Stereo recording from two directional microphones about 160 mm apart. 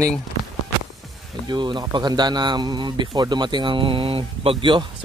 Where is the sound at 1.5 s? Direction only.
30° right (ahead or behind).